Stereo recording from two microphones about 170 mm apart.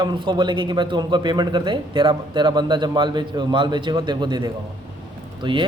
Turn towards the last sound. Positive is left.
turn(degrees=-30)  # may be behind; listen again after turning